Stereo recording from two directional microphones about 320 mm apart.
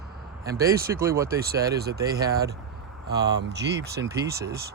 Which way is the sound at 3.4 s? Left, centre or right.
Right.